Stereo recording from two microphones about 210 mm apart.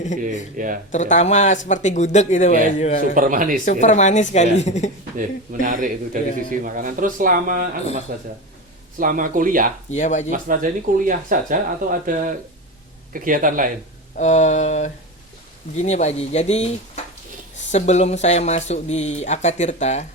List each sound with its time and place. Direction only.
0.5 s speech: 40° right (ahead or behind)
0.9 s speech: 35° left (ahead or behind)
3.2 s speech: 40° right (ahead or behind)
3.7 s speech: 35° left (ahead or behind)
5.1 s speech: 40° right (ahead or behind)
9.9 s speech: 35° left (ahead or behind)
10.2 s speech: 40° right (ahead or behind)
14.2 s speech: 35° left (ahead or behind)